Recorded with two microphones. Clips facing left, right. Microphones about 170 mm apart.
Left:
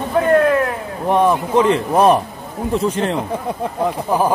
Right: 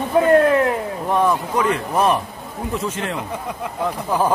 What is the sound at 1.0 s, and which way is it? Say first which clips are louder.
Speech: left 4 dB; 20° left (ahead or behind).